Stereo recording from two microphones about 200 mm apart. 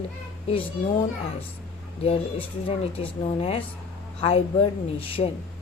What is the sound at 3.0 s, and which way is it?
A woman's voice, 30° left (ahead or behind).